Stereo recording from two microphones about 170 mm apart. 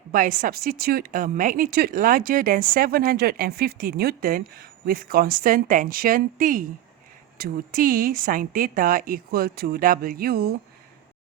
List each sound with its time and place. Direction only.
0.1 s speech: 55° right (ahead or behind)